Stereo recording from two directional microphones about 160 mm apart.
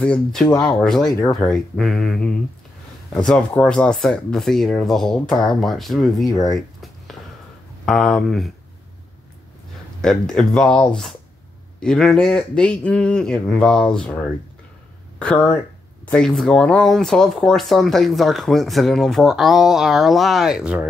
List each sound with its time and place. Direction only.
0.0 s speech: 5° left (ahead or behind)
0.5 s speech: 25° left (ahead or behind)
0.8 s speech: centre (ahead or behind)
6.2 s speech: 20° left (ahead or behind)
7.8 s speech: 5° left (ahead or behind)
10.0 s speech: 5° left (ahead or behind)